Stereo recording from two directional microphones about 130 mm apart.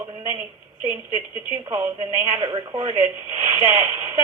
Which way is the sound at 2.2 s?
35° right (ahead or behind).